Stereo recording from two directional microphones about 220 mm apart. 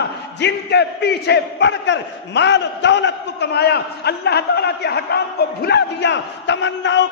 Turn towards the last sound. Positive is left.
turn(degrees=55)  # may be behind; listen again after turning